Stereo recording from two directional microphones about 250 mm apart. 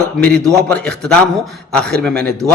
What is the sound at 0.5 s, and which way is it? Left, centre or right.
A man's voice, centre.